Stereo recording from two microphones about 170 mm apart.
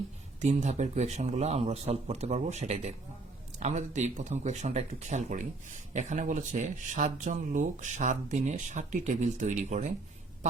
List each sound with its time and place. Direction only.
0.4 s a man's voice: 45° right (ahead or behind)